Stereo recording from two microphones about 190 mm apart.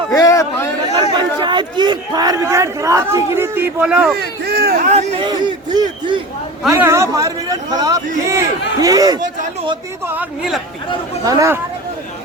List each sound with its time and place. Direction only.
0.1 s chatter: 15° left (ahead or behind)
1.1 s speech: 25° right (ahead or behind); by 4.2 s 5° right (ahead or behind)
4.2 s speech: 55° right (ahead or behind)
4.9 s speech: 35° right (ahead or behind)
5.7 s a man's voice: 20° right (ahead or behind)